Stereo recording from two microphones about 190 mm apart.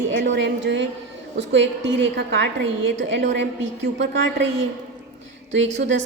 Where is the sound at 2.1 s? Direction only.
60° right (ahead or behind).